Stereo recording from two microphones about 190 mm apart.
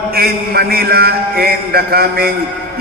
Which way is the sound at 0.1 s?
55° right (ahead or behind).